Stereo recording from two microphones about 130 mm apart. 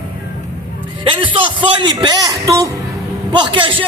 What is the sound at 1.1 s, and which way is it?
A man's voice, 40° right (ahead or behind).